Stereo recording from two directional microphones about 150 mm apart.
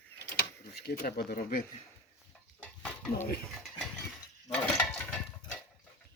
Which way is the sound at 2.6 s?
5° left (ahead or behind).